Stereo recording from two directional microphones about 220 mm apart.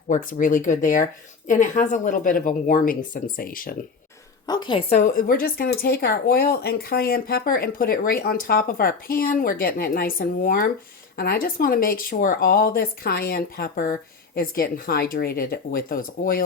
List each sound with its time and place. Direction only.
0.1 s speech: 35° left (ahead or behind)
4.4 s speech: 20° left (ahead or behind); by 16.4 s 40° left (ahead or behind)